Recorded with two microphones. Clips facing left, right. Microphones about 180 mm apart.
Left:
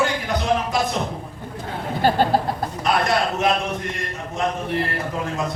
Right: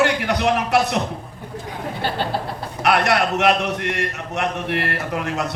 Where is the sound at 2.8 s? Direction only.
70° right (ahead or behind).